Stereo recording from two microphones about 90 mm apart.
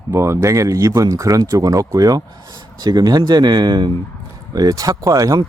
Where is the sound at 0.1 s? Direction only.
30° right (ahead or behind); by 3.9 s 55° right (ahead or behind).